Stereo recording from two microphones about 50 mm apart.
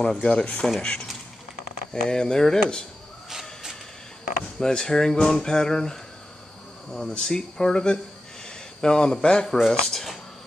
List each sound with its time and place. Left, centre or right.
0.0 s speech: centre
3.3 s a sound: centre
4.6 s a man's voice: centre